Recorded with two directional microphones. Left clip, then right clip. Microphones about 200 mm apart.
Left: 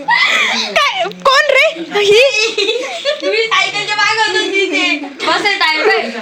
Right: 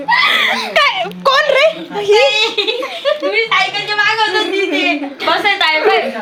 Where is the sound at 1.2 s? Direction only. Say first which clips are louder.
Left 1 dB; 35° left (ahead or behind).